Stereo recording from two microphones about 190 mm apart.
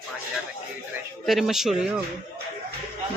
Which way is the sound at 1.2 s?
Centre (ahead or behind).